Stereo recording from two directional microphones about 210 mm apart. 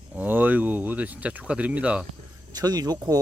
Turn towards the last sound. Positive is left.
turn(degrees=-15)  # may be behind; listen again after turning